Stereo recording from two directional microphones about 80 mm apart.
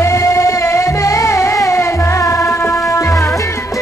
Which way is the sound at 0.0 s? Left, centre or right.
Left.